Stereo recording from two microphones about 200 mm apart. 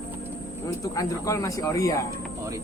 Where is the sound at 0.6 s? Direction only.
15° left (ahead or behind).